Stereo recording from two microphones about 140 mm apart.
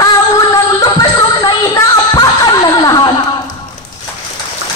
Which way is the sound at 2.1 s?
30° left (ahead or behind).